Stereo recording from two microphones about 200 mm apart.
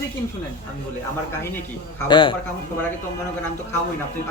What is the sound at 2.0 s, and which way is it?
Speech, 25° left (ahead or behind).